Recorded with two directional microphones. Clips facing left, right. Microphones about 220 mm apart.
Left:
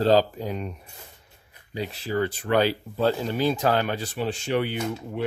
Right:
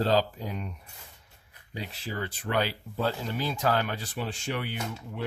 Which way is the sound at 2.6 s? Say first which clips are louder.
Left 7 dB; 30° left (ahead or behind).